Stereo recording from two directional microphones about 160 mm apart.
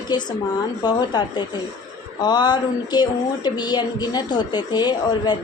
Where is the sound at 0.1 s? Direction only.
25° left (ahead or behind).